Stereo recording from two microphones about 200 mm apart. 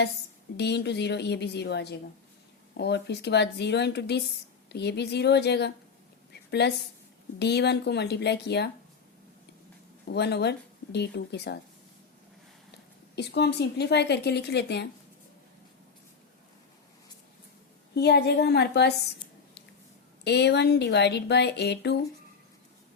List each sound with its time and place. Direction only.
0.5 s a woman's voice: 55° left (ahead or behind)
10.1 s speech: 55° left (ahead or behind)
13.1 s speech: 55° left (ahead or behind)
17.9 s speech: 55° left (ahead or behind)
20.2 s speech: 55° left (ahead or behind)